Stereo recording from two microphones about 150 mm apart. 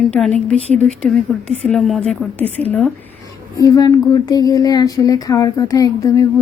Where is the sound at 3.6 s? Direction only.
25° left (ahead or behind).